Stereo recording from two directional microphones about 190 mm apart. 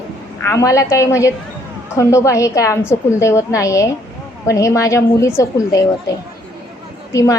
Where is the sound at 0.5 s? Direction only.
15° left (ahead or behind).